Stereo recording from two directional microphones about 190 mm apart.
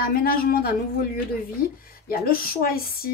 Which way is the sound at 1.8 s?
50° left (ahead or behind).